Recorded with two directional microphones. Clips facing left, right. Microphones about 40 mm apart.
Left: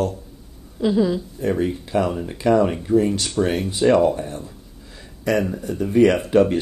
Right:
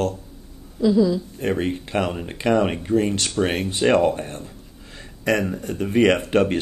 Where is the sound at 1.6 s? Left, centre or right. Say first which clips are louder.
Left 2 dB; right.